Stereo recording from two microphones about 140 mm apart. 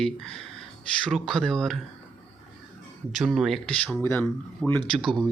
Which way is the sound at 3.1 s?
5° right (ahead or behind).